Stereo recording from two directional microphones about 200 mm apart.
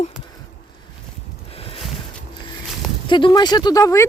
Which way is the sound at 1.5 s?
30° left (ahead or behind).